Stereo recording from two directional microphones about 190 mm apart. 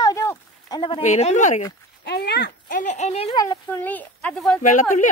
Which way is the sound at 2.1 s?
60° left (ahead or behind).